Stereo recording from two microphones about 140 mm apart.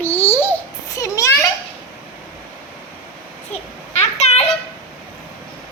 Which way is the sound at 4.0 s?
50° left (ahead or behind).